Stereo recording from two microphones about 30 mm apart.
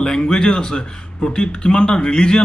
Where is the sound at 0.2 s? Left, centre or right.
Left.